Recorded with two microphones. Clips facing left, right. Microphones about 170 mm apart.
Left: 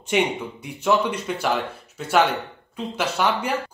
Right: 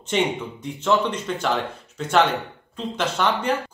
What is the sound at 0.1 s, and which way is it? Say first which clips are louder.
A man's voice: left 1 dB; 10° left (ahead or behind).